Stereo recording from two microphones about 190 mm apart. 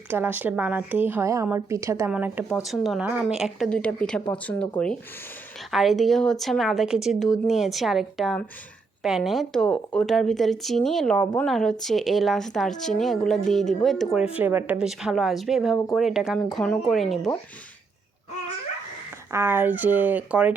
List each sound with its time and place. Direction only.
0.1 s a woman's voice: 10° right (ahead or behind); by 4.7 s 5° left (ahead or behind)
5.7 s speech: centre (ahead or behind)
19.3 s a woman's voice: 10° right (ahead or behind)